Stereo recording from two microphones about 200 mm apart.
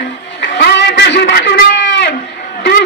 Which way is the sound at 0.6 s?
55° left (ahead or behind).